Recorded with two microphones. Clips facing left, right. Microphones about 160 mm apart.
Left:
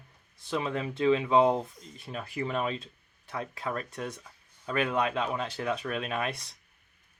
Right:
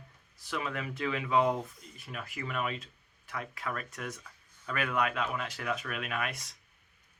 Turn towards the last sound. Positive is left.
turn(degrees=30)  # may be behind; listen again after turning